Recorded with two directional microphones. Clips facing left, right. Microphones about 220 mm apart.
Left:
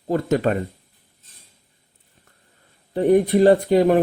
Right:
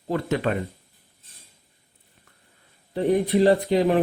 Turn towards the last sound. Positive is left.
turn(degrees=50)  # may be behind; listen again after turning